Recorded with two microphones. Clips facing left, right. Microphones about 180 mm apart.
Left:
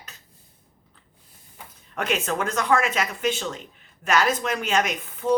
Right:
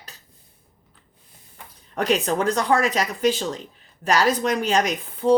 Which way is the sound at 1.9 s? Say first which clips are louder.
Right 4 dB; 35° right (ahead or behind).